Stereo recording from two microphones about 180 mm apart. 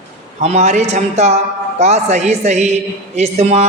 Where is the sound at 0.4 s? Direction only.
35° right (ahead or behind).